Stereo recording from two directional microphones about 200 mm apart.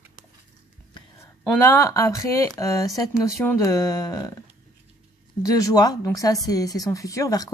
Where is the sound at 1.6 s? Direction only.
15° left (ahead or behind).